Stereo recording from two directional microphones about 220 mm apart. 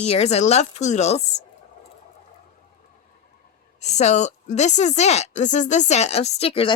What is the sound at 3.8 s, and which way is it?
Speech, 30° left (ahead or behind).